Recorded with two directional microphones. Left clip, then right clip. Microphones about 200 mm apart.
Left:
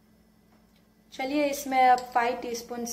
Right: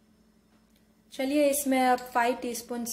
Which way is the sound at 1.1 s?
55° right (ahead or behind).